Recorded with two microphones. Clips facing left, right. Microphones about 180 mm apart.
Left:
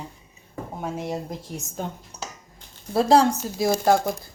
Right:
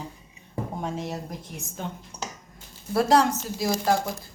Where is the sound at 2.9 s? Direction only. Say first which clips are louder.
Left 3 dB; 25° left (ahead or behind).